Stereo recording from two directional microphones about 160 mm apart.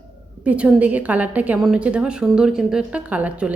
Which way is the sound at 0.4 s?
10° right (ahead or behind).